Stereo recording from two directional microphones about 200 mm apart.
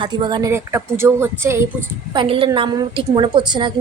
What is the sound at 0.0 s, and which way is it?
Speech, 20° right (ahead or behind).